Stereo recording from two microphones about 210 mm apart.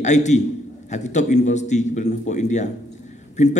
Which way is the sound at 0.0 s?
35° left (ahead or behind).